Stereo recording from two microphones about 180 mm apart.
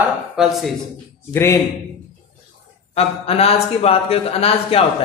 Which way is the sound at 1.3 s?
15° left (ahead or behind).